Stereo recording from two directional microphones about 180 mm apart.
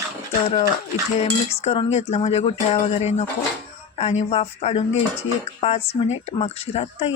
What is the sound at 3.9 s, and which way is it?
Speech, 40° left (ahead or behind).